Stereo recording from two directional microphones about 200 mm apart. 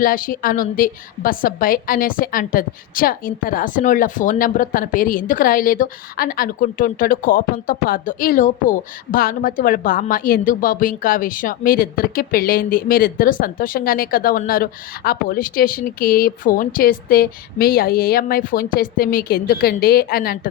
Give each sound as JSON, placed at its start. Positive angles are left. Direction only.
{"t": 0.0, "sound": "a woman's voice", "side_deg": 45}